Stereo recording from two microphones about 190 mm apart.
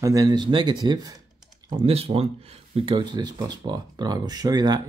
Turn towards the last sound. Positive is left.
turn(degrees=-20)  # may be behind; listen again after turning